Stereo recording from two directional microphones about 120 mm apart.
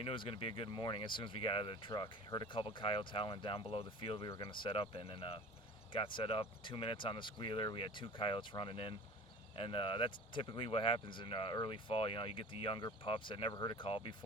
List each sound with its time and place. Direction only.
0.0 s speech: 50° left (ahead or behind)